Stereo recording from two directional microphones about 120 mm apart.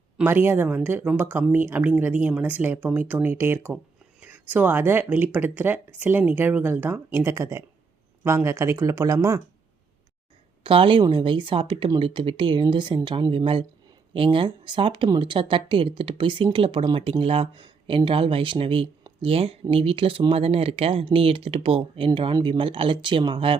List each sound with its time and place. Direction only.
0.2 s speech: 15° right (ahead or behind)
10.6 s a woman's voice: 45° right (ahead or behind)